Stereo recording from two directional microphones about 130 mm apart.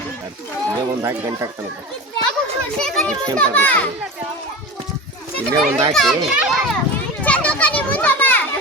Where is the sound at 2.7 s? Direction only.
5° left (ahead or behind).